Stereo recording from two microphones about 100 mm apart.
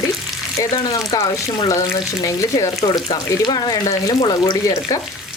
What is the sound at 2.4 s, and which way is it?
Speech, 35° left (ahead or behind).